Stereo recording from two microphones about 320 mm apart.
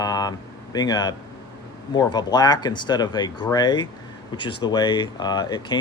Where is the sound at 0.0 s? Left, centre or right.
Centre.